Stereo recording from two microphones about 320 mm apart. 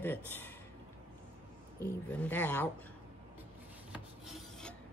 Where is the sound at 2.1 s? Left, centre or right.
Centre.